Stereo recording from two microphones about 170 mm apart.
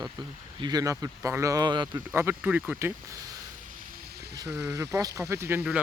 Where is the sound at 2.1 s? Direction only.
10° right (ahead or behind).